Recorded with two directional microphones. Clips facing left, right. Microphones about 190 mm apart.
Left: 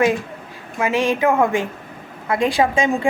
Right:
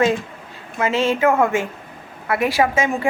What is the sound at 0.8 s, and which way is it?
A woman's voice, 15° left (ahead or behind).